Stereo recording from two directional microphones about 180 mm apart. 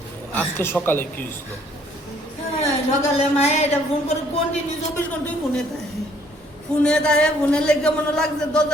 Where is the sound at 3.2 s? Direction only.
35° left (ahead or behind).